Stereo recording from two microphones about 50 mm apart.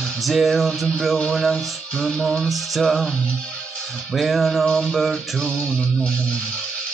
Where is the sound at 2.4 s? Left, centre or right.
Centre.